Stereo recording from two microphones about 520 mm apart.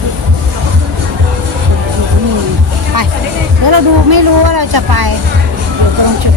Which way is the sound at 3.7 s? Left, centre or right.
Right.